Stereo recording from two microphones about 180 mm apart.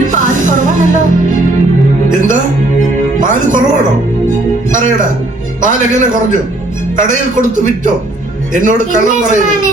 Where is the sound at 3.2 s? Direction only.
45° right (ahead or behind).